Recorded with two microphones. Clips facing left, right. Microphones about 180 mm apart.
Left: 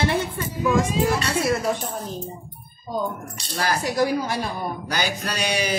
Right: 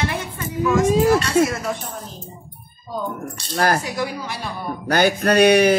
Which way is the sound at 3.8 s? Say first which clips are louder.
Left 4 dB; 40° left (ahead or behind).